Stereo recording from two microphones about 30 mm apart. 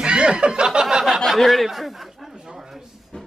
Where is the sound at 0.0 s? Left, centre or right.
Right.